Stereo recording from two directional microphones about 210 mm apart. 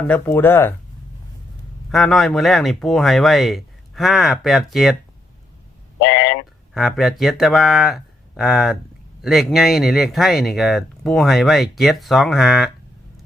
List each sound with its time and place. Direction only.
0.1 s speech: 10° left (ahead or behind)
1.9 s speech: centre (ahead or behind)
6.0 s a sound: 60° left (ahead or behind)
6.7 s speech: centre (ahead or behind)